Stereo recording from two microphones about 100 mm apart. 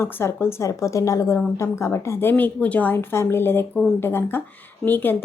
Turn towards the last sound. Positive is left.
turn(degrees=20)  # may be behind; listen again after turning